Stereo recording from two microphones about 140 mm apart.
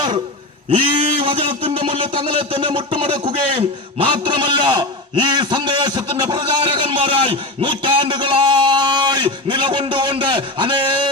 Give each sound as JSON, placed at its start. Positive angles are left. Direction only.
{"t": 0.7, "sound": "a man's voice", "side_deg": -40}